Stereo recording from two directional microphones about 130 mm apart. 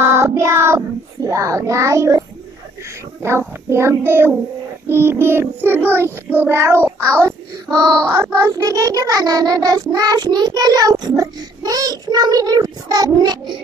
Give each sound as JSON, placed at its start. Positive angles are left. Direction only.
{"t": 0.0, "sound": "cat", "side_deg": -20}
{"t": 3.2, "sound": "child singing", "side_deg": -20}